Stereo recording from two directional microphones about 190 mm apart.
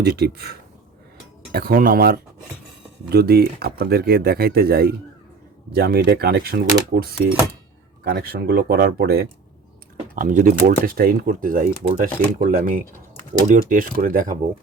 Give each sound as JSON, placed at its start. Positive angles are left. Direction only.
{"t": 0.0, "sound": "speech", "side_deg": -55}
{"t": 1.5, "sound": "speech", "side_deg": -50}
{"t": 10.2, "sound": "speech", "side_deg": -45}